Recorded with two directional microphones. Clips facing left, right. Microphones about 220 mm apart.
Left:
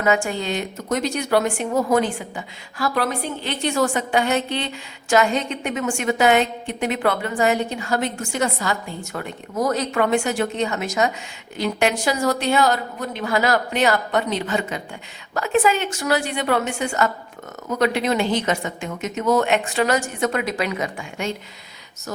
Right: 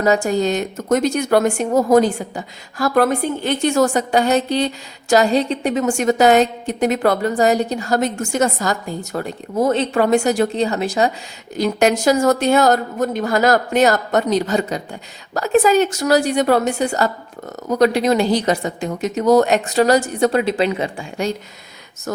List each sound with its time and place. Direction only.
0.0 s a woman's voice: 40° right (ahead or behind)